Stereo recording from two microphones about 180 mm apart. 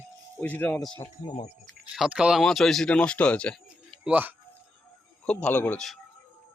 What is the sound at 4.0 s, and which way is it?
Speech, 10° right (ahead or behind).